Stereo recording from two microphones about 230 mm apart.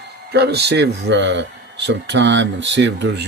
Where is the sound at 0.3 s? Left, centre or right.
Right.